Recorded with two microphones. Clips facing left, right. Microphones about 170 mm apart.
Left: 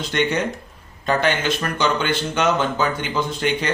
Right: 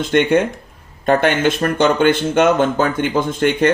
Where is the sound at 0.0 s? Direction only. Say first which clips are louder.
Right 7 dB; 55° right (ahead or behind).